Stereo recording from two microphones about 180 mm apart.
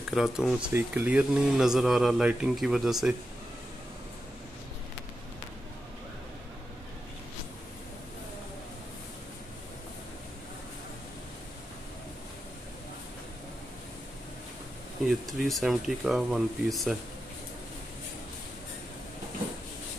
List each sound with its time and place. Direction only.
0.1 s speech: centre (ahead or behind)
15.0 s speech: centre (ahead or behind)